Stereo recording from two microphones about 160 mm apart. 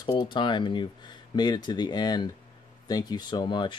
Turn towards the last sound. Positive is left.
turn(degrees=30)  # may be behind; listen again after turning